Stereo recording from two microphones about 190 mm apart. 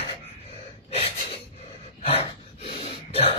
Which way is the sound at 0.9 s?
30° left (ahead or behind).